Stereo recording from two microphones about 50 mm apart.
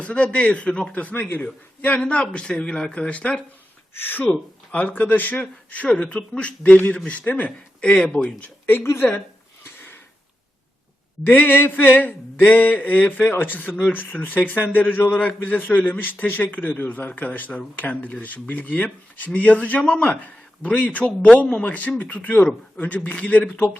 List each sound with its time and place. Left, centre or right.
0.0 s a man's voice: left
2.0 s a man's voice: left
3.9 s a woman's voice: left
8.6 s a woman's voice: left
9.6 s sniff: left
11.3 s a man's voice: left